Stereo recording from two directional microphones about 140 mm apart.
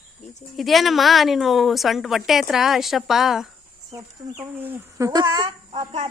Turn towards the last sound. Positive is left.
turn(degrees=-35)  # may be behind; listen again after turning